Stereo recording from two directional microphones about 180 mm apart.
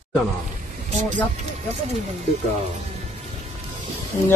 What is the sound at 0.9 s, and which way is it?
Vehicle, 40° right (ahead or behind).